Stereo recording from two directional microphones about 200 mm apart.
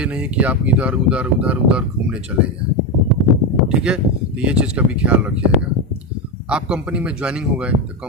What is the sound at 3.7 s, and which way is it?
A man's voice, 5° right (ahead or behind).